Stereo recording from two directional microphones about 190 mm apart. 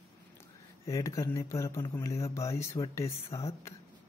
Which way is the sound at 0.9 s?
15° left (ahead or behind).